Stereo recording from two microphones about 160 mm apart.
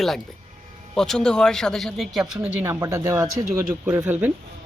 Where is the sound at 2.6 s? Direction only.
15° right (ahead or behind).